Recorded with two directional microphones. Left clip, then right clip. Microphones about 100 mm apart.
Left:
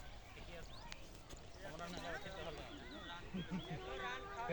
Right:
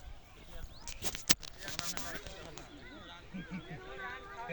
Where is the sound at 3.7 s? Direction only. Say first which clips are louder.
Right 2 dB; 20° left (ahead or behind).